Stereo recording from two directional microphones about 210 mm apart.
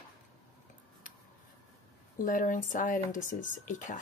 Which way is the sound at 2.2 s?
40° left (ahead or behind).